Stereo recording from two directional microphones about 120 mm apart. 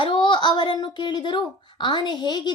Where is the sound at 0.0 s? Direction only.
40° left (ahead or behind).